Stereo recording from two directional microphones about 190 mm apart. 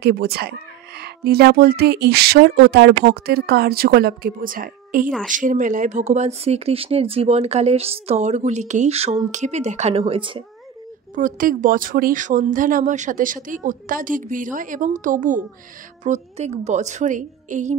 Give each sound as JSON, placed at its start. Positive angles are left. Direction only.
{"t": 0.0, "sound": "speech", "side_deg": -55}
{"t": 11.1, "sound": "speech", "side_deg": -45}